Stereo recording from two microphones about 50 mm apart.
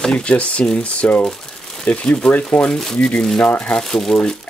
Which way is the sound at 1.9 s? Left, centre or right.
Left.